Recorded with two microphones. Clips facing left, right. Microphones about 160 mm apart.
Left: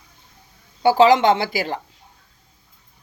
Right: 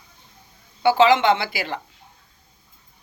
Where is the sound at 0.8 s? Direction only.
40° left (ahead or behind).